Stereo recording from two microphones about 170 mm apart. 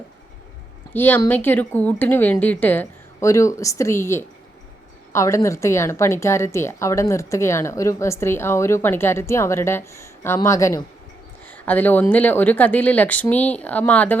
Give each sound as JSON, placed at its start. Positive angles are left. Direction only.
{"t": 0.9, "sound": "a woman's voice", "side_deg": 10}